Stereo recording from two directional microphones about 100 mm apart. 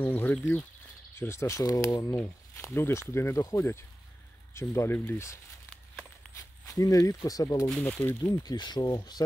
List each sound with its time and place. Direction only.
0.0 s speech: 20° left (ahead or behind); by 7.7 s 35° left (ahead or behind)
7.8 s speech: 15° left (ahead or behind)
8.2 s speech: 45° left (ahead or behind)